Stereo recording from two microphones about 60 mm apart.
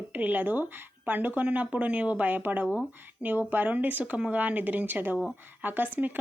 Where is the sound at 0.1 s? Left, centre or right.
Right.